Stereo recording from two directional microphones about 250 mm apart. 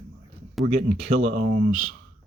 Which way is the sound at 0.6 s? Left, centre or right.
Right.